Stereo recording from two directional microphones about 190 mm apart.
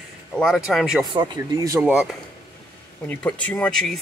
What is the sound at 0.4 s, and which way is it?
Speech, centre (ahead or behind).